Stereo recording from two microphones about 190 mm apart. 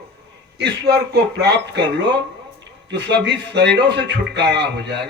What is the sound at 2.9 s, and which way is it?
A man's voice, 65° right (ahead or behind).